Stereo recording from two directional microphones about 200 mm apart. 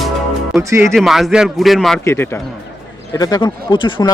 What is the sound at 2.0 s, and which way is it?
Speech, 10° left (ahead or behind).